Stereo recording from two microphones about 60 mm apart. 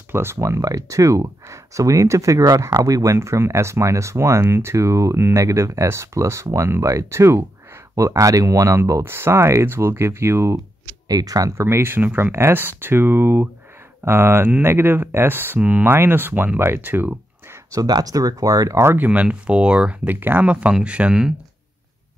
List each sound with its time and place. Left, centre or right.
0.1 s speech: right
0.4 s speech: right
3.2 s speech: right
5.1 s speech: right
5.4 s speech: right
8.0 s speech: right
9.0 s speech: right
11.1 s speech: right
11.5 s speech: right
17.6 s speech: right
18.9 s speech: right
20.2 s speech: right; by 21.3 s centre